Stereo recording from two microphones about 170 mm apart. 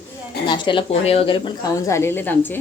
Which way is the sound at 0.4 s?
25° left (ahead or behind).